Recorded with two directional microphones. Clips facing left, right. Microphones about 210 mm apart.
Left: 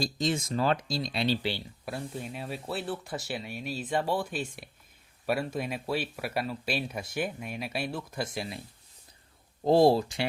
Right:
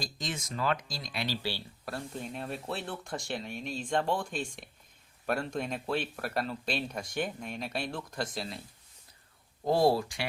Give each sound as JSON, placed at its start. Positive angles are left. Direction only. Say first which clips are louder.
{"t": 0.0, "sound": "speech", "louder": "left 9 dB", "side_deg": 30}
{"t": 9.6, "sound": "speech", "louder": "left 4 dB", "side_deg": 25}